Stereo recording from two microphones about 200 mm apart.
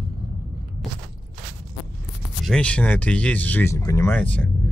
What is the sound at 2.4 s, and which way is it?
Speech, 5° left (ahead or behind).